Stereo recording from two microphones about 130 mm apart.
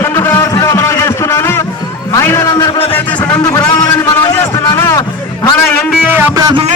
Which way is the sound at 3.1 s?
30° left (ahead or behind).